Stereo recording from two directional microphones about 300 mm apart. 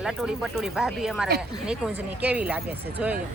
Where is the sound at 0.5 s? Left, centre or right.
Centre.